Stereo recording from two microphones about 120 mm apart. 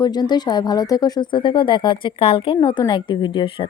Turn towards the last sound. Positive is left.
turn(degrees=40)  # may be behind; listen again after turning